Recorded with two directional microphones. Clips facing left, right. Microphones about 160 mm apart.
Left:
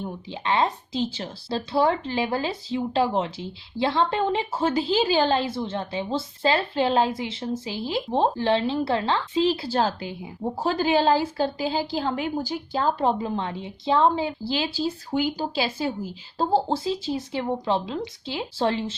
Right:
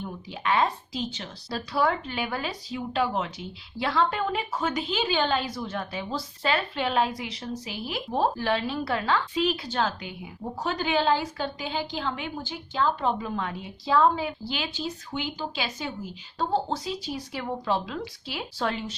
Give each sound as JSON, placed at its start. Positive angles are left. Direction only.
{"t": 0.0, "sound": "a woman's voice", "side_deg": 25}